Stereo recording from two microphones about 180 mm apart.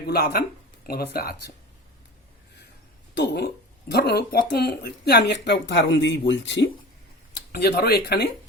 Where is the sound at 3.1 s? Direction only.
70° left (ahead or behind); by 6.6 s 85° left.